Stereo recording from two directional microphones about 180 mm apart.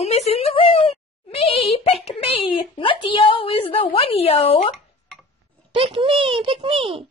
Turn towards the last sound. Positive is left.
turn(degrees=-30)  # may be behind; listen again after turning